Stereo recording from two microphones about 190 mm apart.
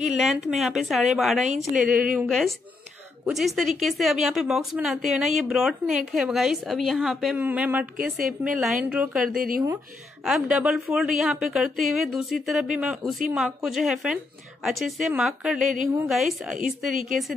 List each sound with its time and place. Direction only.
0.0 s speech: centre (ahead or behind)
1.7 s a woman's voice: 45° right (ahead or behind)
2.2 s speech: centre (ahead or behind)
8.0 s a woman's voice: 50° right (ahead or behind)
8.9 s speech: 5° right (ahead or behind)
9.3 s a woman's voice: 50° right (ahead or behind)
10.2 s speech: 5° right (ahead or behind)